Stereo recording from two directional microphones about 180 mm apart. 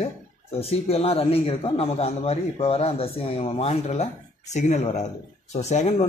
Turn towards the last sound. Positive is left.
turn(degrees=40)  # may be behind; listen again after turning